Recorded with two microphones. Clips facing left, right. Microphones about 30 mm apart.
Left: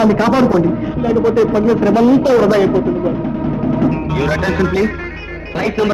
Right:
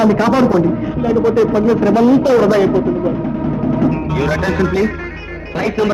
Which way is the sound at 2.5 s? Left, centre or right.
Centre.